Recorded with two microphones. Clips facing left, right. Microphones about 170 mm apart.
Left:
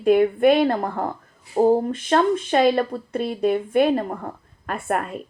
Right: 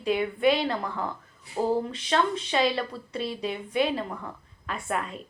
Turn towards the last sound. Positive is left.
turn(degrees=55)  # may be behind; listen again after turning